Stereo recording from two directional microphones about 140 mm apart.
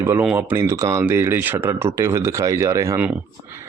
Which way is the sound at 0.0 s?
15° right (ahead or behind).